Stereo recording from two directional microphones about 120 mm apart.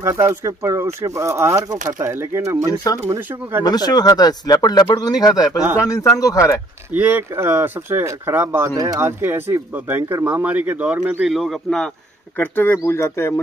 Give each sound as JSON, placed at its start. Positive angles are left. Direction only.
{"t": 0.0, "sound": "speech", "side_deg": -20}
{"t": 3.6, "sound": "speech", "side_deg": 35}
{"t": 6.9, "sound": "speech", "side_deg": -15}
{"t": 11.1, "sound": "speech", "side_deg": 0}
{"t": 12.4, "sound": "speech", "side_deg": 15}